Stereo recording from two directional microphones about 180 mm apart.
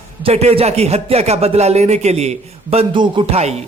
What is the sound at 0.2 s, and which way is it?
Speech, 35° right (ahead or behind).